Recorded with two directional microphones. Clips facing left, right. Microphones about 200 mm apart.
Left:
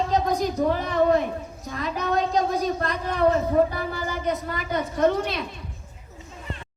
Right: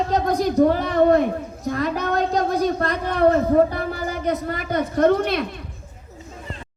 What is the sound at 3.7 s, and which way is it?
Speech, 65° right (ahead or behind).